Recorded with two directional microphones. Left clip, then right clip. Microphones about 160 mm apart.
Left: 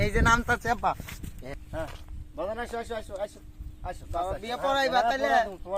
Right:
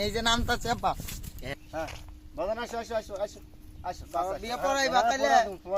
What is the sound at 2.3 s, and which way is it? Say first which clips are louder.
Speech: right 1 dB; 15° left (ahead or behind).